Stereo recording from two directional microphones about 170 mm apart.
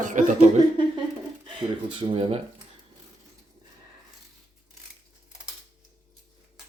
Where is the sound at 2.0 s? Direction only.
30° right (ahead or behind).